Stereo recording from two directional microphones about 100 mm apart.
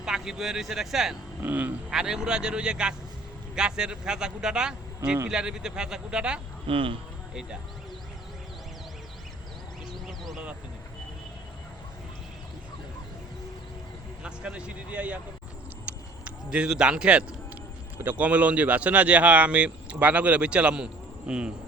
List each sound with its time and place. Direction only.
0.0 s speech: 5° right (ahead or behind)
1.4 s speech: 15° right (ahead or behind)
1.9 s speech: 5° right (ahead or behind)
6.7 s speech: 65° right (ahead or behind)
10.1 s a sound: centre (ahead or behind)
14.3 s speech: 10° right (ahead or behind)
15.9 s a sound: 10° right (ahead or behind)
17.9 s speech: 20° right (ahead or behind)